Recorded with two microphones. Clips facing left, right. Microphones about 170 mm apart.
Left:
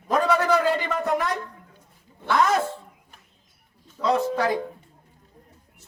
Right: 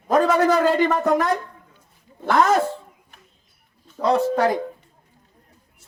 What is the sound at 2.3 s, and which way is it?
Speech, 55° right (ahead or behind).